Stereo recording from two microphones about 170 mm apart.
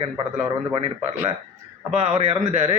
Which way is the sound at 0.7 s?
30° right (ahead or behind).